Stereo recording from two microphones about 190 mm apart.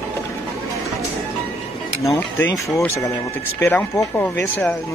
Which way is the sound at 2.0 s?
10° left (ahead or behind).